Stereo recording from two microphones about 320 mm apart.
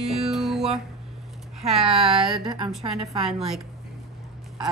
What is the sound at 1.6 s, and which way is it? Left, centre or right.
Speech, centre.